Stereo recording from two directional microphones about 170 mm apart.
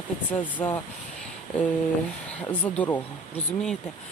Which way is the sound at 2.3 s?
10° left (ahead or behind).